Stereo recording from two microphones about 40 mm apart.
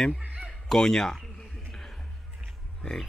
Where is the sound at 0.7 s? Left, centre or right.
Centre.